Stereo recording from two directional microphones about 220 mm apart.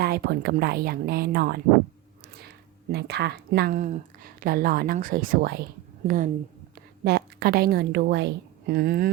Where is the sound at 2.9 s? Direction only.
50° right (ahead or behind).